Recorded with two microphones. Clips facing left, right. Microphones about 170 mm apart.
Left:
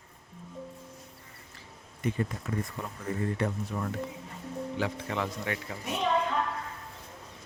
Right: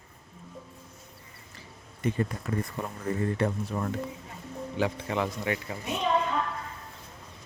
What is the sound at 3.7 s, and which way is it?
Speech, 40° right (ahead or behind).